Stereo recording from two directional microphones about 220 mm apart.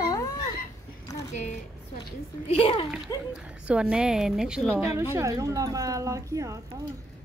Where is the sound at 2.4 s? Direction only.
25° left (ahead or behind).